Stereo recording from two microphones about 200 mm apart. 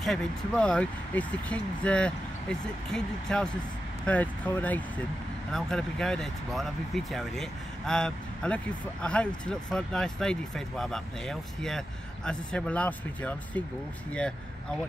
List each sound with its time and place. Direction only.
0.0 s speech: centre (ahead or behind)